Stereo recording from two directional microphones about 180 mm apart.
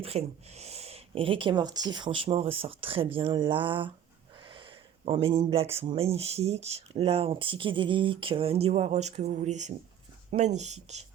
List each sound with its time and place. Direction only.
0.0 s speech: 35° right (ahead or behind)
4.4 s a sound: 30° right (ahead or behind)
5.7 s speech: 30° right (ahead or behind)